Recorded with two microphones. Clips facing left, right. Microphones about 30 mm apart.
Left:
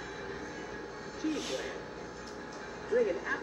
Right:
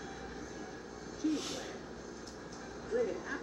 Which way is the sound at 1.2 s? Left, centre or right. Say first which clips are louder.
Left 1 dB; left.